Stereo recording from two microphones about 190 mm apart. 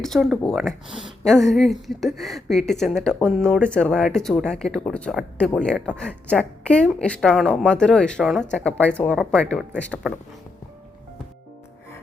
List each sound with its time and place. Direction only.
0.0 s speech: centre (ahead or behind)